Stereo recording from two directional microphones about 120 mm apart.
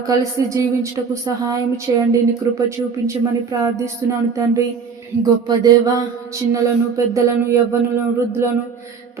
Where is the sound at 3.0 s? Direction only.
25° right (ahead or behind).